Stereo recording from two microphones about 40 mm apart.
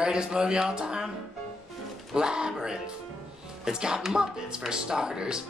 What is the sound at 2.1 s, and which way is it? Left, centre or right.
Speech, centre.